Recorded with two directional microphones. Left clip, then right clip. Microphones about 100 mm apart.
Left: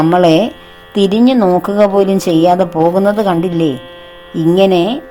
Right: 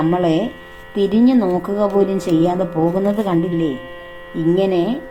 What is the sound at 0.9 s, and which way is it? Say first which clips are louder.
Speech: left 5 dB; 70° left (ahead or behind).